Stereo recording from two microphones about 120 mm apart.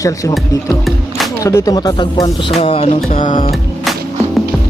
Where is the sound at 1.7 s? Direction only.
35° left (ahead or behind); by 2.9 s 55° left (ahead or behind).